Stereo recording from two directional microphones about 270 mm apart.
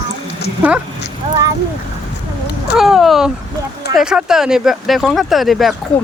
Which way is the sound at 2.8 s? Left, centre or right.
Centre.